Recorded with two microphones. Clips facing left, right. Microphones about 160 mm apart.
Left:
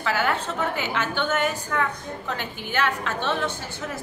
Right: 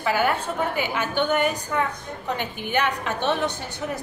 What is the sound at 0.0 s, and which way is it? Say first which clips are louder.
A woman's voice: right 2 dB; 15° right (ahead or behind).